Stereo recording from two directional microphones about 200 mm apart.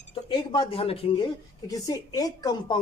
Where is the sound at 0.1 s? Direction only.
25° left (ahead or behind).